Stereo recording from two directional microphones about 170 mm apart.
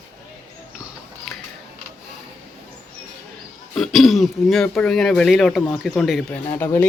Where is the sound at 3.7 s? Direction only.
Centre (ahead or behind).